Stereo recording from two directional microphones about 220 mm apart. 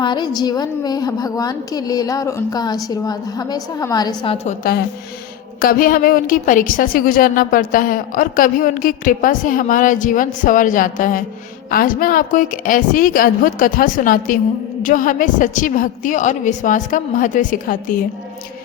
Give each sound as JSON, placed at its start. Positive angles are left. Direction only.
{"t": 0.0, "sound": "a woman's voice", "side_deg": 20}
{"t": 4.4, "sound": "a woman's voice", "side_deg": 40}